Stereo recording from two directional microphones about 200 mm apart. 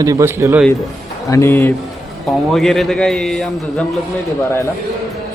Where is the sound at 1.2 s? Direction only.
15° left (ahead or behind).